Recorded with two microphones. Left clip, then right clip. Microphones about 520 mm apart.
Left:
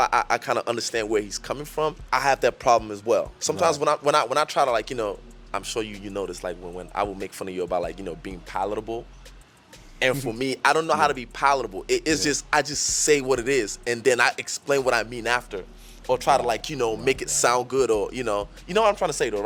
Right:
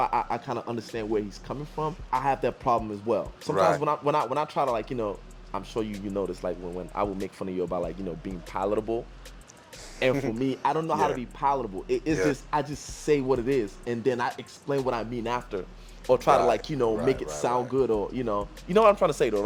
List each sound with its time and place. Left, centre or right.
0.0 s speech: left
8.5 s speech: left
10.0 s speech: left